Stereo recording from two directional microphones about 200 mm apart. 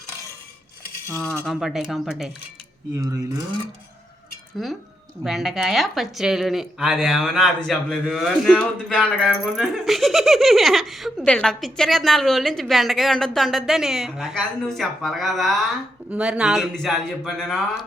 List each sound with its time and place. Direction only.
1.0 s cutlery: 5° left (ahead or behind)
1.5 s speech: centre (ahead or behind)
3.0 s speech: 15° right (ahead or behind)
4.5 s speech: centre (ahead or behind)